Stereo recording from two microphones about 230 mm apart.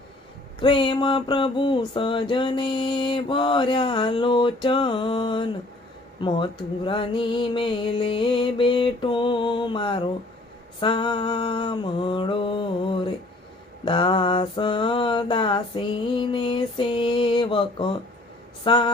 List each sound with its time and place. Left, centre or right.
0.6 s mantra: left
18.6 s speech: left